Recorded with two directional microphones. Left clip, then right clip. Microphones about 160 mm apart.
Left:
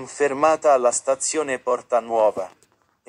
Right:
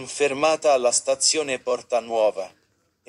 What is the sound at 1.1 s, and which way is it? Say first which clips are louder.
A man's voice: even; 15° right (ahead or behind).